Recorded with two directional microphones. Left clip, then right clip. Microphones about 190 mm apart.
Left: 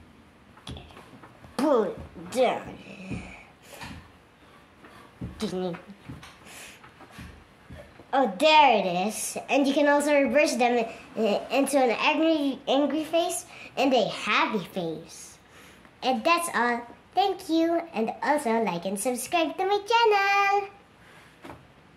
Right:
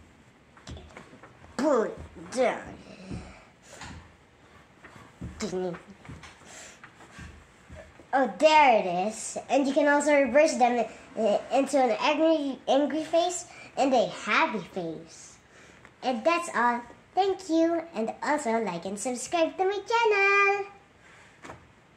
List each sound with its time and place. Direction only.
0.7 s a sound: 15° left (ahead or behind)
2.3 s speech: 15° left (ahead or behind)
8.1 s a child's voice: 15° left (ahead or behind)